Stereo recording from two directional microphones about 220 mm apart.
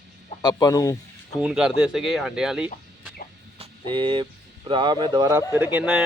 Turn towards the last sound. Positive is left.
turn(degrees=-5)  # may be behind; listen again after turning